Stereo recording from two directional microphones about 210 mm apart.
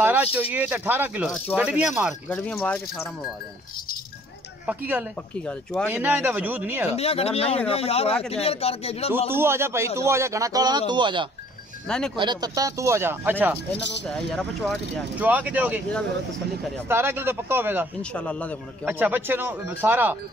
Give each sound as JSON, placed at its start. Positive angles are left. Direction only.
{"t": 0.0, "sound": "speech", "side_deg": -10}
{"t": 2.2, "sound": "speech", "side_deg": 10}
{"t": 4.6, "sound": "speech", "side_deg": -5}
{"t": 5.3, "sound": "speech", "side_deg": 5}
{"t": 5.9, "sound": "speech", "side_deg": -10}
{"t": 6.9, "sound": "speech", "side_deg": 30}
{"t": 9.3, "sound": "speech", "side_deg": -10}
{"t": 14.0, "sound": "speech", "side_deg": 5}
{"t": 15.1, "sound": "speech", "side_deg": -5}
{"t": 16.9, "sound": "speech", "side_deg": -10}
{"t": 18.1, "sound": "speech", "side_deg": 5}
{"t": 18.9, "sound": "speech", "side_deg": -10}